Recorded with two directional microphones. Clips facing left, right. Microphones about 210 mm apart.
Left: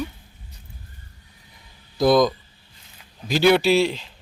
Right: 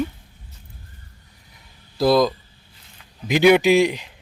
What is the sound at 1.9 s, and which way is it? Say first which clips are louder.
Speech: even; 5° right (ahead or behind).